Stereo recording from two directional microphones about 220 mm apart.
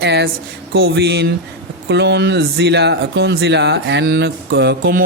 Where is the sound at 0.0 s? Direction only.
50° right (ahead or behind).